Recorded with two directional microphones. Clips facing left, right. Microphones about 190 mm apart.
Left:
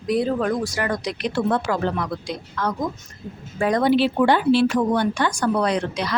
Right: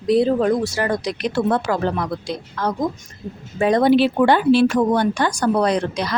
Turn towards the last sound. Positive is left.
turn(degrees=-40)  # may be behind; listen again after turning